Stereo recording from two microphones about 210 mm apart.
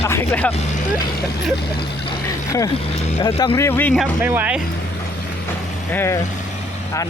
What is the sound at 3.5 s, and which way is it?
Speech, 10° left (ahead or behind).